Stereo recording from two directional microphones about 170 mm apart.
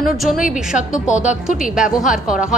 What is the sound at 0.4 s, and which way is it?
Speech, 50° left (ahead or behind).